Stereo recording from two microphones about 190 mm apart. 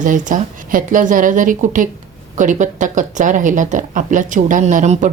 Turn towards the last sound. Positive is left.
turn(degrees=-40)  # may be behind; listen again after turning